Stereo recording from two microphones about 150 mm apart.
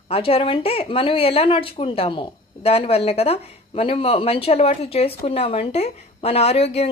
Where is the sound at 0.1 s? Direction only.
40° left (ahead or behind).